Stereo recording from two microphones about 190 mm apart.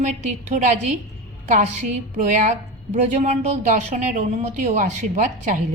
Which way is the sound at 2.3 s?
40° right (ahead or behind).